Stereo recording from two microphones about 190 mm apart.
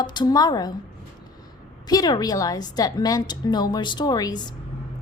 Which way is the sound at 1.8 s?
20° left (ahead or behind).